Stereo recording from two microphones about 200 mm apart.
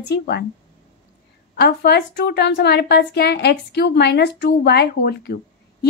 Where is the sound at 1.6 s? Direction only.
50° left (ahead or behind).